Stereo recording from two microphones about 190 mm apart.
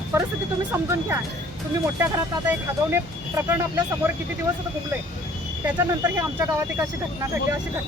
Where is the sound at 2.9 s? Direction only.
15° right (ahead or behind).